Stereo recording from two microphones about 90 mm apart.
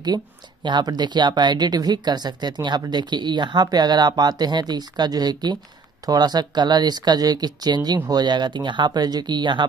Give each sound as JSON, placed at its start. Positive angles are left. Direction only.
{"t": 0.7, "sound": "speech", "side_deg": -55}